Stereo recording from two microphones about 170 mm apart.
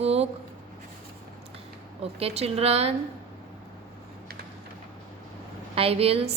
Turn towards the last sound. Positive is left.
turn(degrees=-35)  # may be behind; listen again after turning